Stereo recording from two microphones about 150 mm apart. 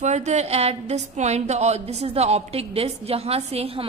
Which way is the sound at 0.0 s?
50° right (ahead or behind).